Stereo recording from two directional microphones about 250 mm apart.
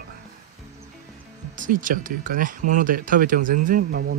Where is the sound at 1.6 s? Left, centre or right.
Right.